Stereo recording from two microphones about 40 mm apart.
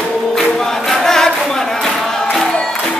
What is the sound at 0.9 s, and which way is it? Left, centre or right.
Chant, centre.